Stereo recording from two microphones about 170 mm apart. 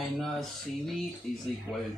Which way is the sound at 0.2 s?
Centre (ahead or behind).